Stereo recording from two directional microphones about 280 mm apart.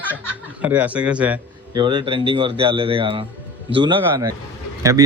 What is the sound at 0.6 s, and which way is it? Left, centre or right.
Speech, centre.